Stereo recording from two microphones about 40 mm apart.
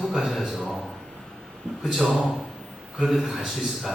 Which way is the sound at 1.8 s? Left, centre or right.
Centre.